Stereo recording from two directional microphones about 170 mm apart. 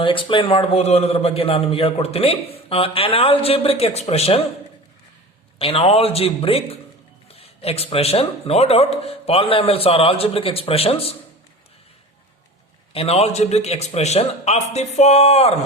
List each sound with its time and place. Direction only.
0.0 s a man's voice: 30° left (ahead or behind)
5.5 s a man's voice: 35° left (ahead or behind)
12.9 s a man's voice: 35° left (ahead or behind)